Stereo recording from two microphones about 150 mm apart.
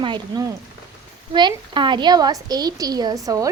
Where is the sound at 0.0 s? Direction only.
30° right (ahead or behind).